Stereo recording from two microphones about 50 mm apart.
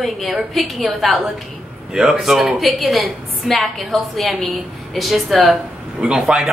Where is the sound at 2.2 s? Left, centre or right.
Centre.